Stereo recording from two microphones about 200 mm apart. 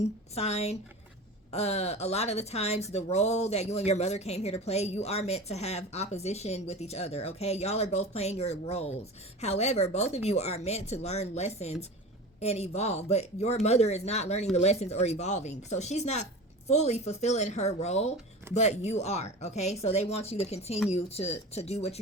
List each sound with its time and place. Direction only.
0.3 s speech: 35° left (ahead or behind)